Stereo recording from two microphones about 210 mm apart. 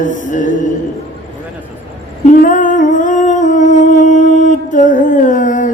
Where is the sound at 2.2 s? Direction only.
40° left (ahead or behind).